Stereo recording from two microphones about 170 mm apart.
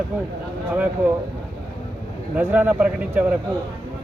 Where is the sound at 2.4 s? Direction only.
10° right (ahead or behind).